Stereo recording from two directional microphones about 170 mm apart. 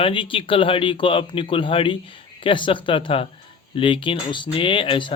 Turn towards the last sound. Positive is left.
turn(degrees=30)  # may be behind; listen again after turning